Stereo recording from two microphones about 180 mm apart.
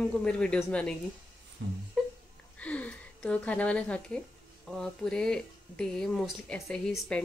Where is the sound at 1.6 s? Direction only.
90° right.